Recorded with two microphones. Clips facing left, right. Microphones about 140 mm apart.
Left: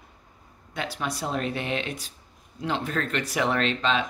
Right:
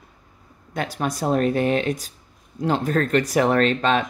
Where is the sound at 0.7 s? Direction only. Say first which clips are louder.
Right 5 dB; 45° right (ahead or behind).